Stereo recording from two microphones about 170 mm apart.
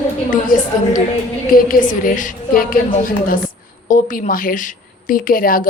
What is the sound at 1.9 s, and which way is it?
A woman's voice, 50° left (ahead or behind).